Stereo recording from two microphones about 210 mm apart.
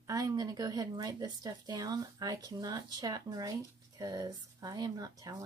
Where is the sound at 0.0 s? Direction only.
15° right (ahead or behind).